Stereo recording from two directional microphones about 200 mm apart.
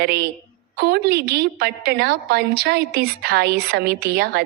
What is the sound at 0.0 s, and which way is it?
A woman's voice, 55° right (ahead or behind).